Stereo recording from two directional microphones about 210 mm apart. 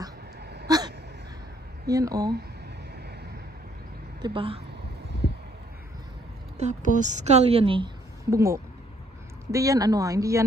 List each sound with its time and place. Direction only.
0.7 s a sound: 20° right (ahead or behind)
1.9 s speech: 15° right (ahead or behind)
4.2 s a woman's voice: 25° right (ahead or behind)
6.6 s a woman's voice: 35° right (ahead or behind); by 10.4 s 15° right (ahead or behind)